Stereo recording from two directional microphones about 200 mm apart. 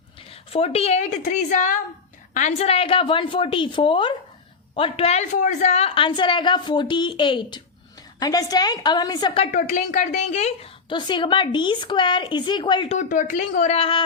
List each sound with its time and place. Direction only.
0.5 s a woman's voice: 30° left (ahead or behind)
9.5 s a woman's voice: 40° left (ahead or behind); by 13.0 s 25° left (ahead or behind)
13.0 s a woman's voice: 40° left (ahead or behind)